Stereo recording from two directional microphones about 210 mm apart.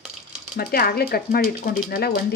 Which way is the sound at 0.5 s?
45° left (ahead or behind).